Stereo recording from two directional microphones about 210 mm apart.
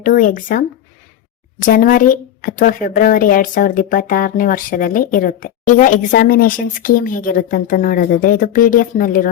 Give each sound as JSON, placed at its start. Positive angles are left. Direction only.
{"t": 0.0, "sound": "a woman's voice", "side_deg": 40}